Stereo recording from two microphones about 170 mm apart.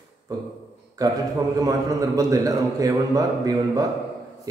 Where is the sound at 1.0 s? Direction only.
20° right (ahead or behind).